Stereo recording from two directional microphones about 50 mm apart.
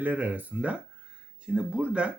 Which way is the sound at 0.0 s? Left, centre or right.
Right.